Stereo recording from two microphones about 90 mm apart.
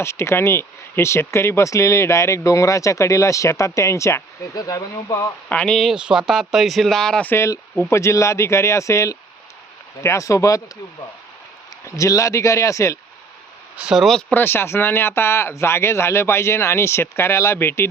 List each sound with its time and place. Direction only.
0.0 s speech: 30° left (ahead or behind)
5.5 s speech: 10° left (ahead or behind)
5.9 s speech: 10° right (ahead or behind); by 7.3 s 5° left (ahead or behind)
7.3 s speech: 30° left (ahead or behind)
11.9 s speech: 35° left (ahead or behind)
13.7 s speech: 5° right (ahead or behind)
14.3 s speech: 25° left (ahead or behind)